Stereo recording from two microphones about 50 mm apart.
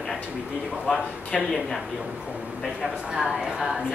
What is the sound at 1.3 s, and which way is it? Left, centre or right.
Speech, centre.